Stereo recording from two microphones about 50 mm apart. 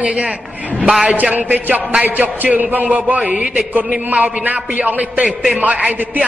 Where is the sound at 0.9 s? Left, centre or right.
Centre.